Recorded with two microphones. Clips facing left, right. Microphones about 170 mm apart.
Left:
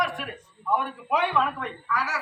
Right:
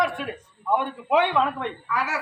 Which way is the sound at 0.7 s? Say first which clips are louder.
Right 4 dB; 25° right (ahead or behind).